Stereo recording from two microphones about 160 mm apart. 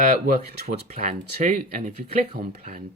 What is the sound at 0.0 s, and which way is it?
Speech, 65° right (ahead or behind).